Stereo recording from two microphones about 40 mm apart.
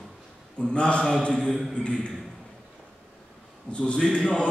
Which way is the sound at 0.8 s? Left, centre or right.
Left.